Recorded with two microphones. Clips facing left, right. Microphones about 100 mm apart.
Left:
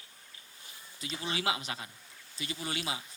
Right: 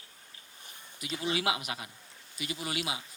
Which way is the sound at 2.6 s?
30° left (ahead or behind).